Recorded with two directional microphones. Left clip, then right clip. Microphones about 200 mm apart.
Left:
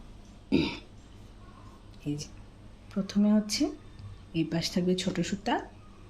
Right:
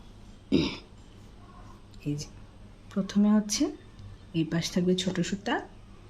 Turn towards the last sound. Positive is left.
turn(degrees=-5)  # may be behind; listen again after turning